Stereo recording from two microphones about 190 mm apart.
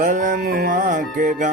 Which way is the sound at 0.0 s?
45° right (ahead or behind).